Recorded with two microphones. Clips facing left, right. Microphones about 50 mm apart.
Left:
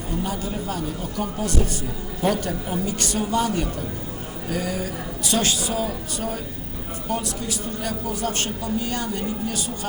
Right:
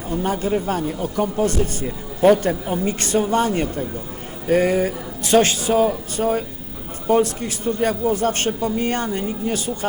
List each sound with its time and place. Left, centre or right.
0.1 s speech: right